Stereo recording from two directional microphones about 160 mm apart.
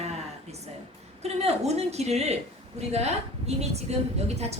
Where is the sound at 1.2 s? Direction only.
40° right (ahead or behind).